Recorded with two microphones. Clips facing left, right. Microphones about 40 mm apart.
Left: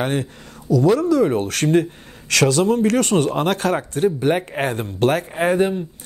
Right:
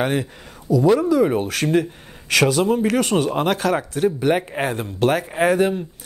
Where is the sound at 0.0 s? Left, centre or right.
Centre.